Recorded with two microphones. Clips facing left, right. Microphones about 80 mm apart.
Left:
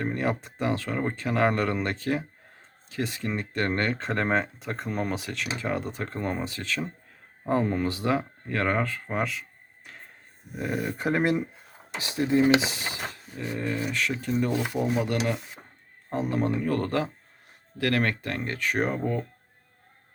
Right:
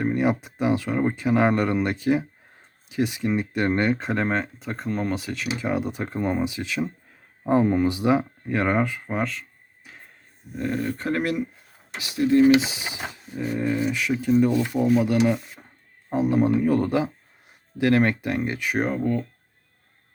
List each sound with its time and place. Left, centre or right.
0.0 s speech: centre
9.1 s a sound: centre
10.5 s speech: centre; by 12.3 s left
12.4 s speech: centre
18.9 s speech: centre